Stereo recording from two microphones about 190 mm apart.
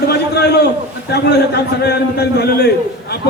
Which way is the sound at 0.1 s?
60° left (ahead or behind).